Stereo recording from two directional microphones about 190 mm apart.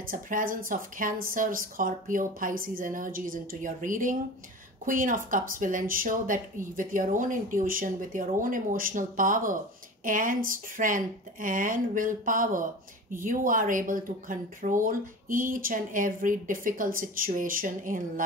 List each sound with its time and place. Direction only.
0.1 s speech: 45° right (ahead or behind)